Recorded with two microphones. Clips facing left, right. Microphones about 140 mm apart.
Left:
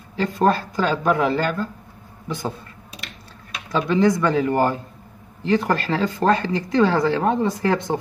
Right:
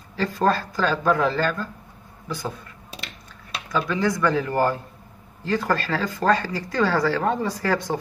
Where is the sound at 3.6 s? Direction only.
25° left (ahead or behind).